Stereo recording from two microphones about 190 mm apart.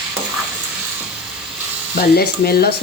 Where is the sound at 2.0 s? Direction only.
55° left (ahead or behind).